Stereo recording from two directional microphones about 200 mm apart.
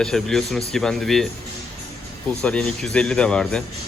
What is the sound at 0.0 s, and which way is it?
A man's voice, centre (ahead or behind).